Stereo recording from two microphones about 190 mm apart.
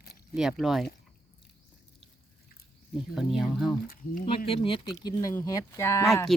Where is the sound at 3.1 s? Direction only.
Centre (ahead or behind).